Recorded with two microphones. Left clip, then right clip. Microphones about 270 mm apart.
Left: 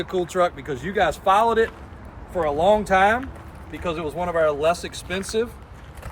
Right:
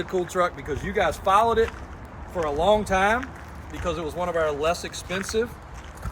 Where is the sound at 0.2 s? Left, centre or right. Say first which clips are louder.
Left 3 dB; left.